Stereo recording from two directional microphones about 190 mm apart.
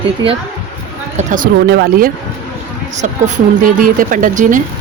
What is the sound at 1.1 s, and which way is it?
Speech, 45° right (ahead or behind).